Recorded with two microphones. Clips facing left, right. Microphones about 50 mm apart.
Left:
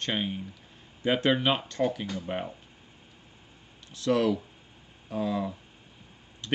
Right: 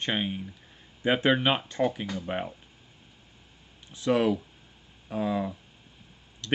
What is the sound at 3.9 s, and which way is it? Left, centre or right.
Speech, centre.